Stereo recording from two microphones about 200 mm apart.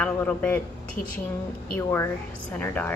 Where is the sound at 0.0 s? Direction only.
5° left (ahead or behind).